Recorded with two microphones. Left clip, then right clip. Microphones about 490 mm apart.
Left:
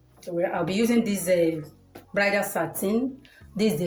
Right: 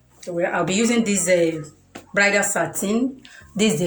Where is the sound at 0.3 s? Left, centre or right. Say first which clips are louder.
Right 4 dB; left.